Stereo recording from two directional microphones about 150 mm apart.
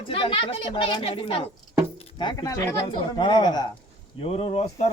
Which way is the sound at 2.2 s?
25° left (ahead or behind).